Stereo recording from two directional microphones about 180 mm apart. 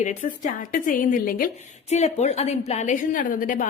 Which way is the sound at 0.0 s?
45° left (ahead or behind).